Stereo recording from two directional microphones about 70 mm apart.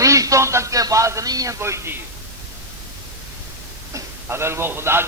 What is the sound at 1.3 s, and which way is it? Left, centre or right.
Speech, right.